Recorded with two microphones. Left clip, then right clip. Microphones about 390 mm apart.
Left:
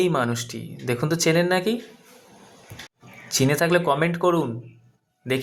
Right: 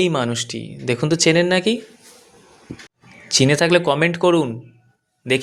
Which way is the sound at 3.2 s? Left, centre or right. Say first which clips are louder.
Right 5 dB; left.